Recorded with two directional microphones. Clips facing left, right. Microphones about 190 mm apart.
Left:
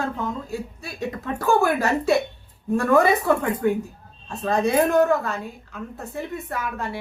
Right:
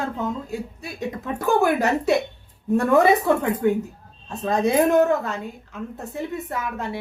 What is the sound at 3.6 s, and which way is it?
Speech, 20° right (ahead or behind).